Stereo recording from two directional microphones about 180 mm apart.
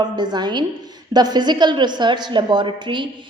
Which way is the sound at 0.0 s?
25° right (ahead or behind).